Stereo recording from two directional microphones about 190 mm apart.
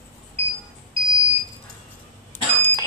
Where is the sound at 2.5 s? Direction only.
10° left (ahead or behind).